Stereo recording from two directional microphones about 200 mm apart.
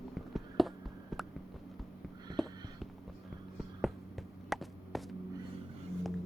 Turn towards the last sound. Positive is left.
turn(degrees=0)  # may be behind; listen again after turning